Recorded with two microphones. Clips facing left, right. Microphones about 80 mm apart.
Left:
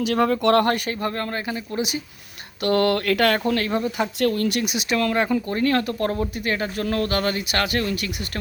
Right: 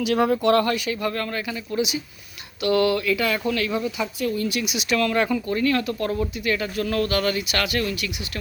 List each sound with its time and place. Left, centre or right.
0.0 s speech: left
1.0 s speech: left
3.4 s speech: left
4.2 s speech: left
4.7 s speech: left